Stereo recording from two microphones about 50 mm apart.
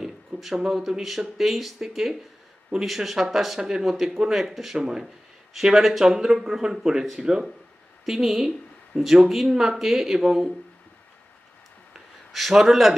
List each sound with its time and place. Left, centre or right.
0.0 s a sound: centre
0.6 s speech: centre
4.7 s speech: centre
5.0 s speech: centre
12.3 s speech: centre